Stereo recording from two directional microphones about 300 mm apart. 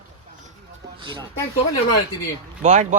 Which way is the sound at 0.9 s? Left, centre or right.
Centre.